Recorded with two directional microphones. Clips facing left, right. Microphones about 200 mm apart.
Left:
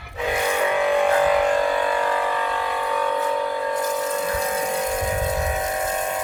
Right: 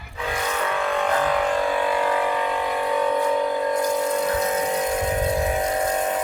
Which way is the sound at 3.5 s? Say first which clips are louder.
Right 2 dB; 25° right (ahead or behind).